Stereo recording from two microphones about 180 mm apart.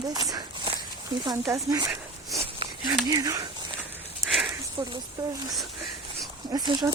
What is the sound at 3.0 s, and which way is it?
Speech, 20° right (ahead or behind).